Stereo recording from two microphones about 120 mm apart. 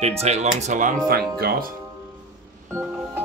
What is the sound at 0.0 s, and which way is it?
Speech, 65° right (ahead or behind).